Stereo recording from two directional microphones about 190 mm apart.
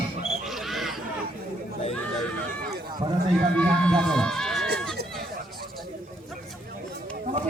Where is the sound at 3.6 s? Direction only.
5° left (ahead or behind).